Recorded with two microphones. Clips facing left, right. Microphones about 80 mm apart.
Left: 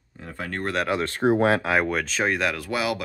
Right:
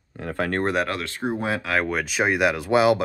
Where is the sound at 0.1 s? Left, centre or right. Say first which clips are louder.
Right 8 dB; right.